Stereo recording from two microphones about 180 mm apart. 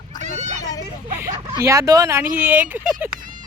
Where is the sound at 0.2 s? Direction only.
40° right (ahead or behind).